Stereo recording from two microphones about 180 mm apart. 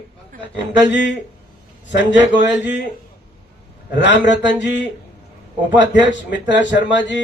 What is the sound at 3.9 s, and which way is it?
A man's voice, 80° left.